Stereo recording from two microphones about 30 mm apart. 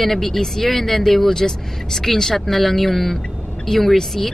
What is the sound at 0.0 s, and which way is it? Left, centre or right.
A woman's voice, centre.